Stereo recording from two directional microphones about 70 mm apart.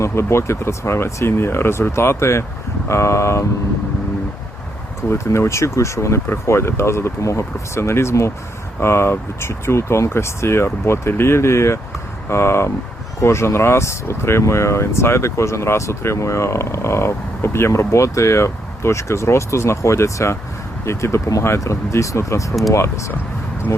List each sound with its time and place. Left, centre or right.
0.0 s speech: left
5.0 s speech: left